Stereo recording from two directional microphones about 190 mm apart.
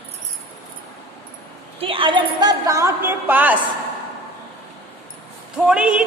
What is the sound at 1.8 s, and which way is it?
A woman's voice, 25° right (ahead or behind).